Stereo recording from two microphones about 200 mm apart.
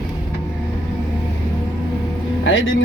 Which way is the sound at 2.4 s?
75° left (ahead or behind).